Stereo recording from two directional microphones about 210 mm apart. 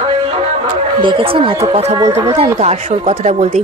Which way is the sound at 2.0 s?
15° right (ahead or behind).